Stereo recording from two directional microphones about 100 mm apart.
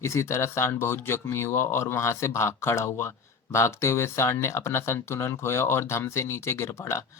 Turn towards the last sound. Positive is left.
turn(degrees=25)  # may be behind; listen again after turning